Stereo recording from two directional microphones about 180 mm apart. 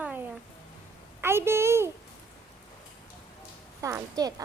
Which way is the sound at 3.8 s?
15° right (ahead or behind).